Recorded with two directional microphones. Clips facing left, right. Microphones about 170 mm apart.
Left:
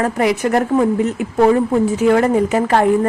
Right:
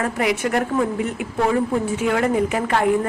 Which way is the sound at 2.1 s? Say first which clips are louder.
Left 4 dB; 35° left (ahead or behind).